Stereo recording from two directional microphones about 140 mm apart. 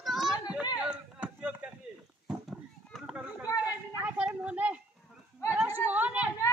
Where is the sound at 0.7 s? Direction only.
5° right (ahead or behind).